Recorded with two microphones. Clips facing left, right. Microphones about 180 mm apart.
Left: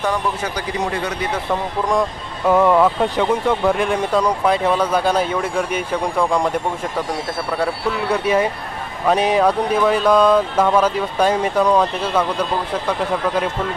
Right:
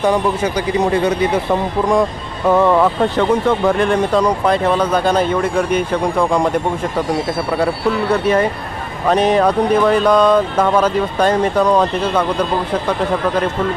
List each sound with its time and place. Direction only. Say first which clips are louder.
0.0 s speech: right 6 dB; 15° right (ahead or behind)
1.5 s speech: right 4 dB; 5° right (ahead or behind)
8.1 s speech: right 1 dB; 10° left (ahead or behind)